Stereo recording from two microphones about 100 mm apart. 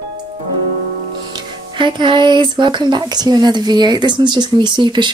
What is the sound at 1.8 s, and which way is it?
Speech, 55° right (ahead or behind).